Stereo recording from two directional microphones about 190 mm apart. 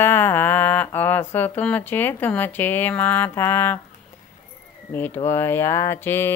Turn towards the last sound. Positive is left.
turn(degrees=10)  # may be behind; listen again after turning